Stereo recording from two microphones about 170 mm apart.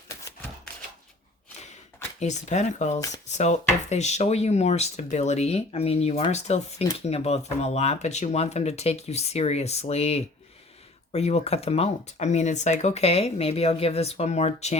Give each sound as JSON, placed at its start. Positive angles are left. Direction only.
{"t": 2.1, "sound": "speech", "side_deg": 45}